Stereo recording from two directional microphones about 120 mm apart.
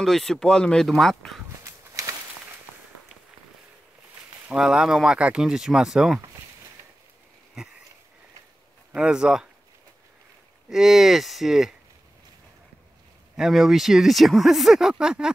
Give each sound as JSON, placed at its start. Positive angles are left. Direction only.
{"t": 0.0, "sound": "speech", "side_deg": 5}
{"t": 1.6, "sound": "a sound", "side_deg": -25}
{"t": 4.5, "sound": "speech", "side_deg": -5}
{"t": 8.9, "sound": "speech", "side_deg": -5}
{"t": 10.7, "sound": "speech", "side_deg": -5}
{"t": 13.4, "sound": "speech", "side_deg": 0}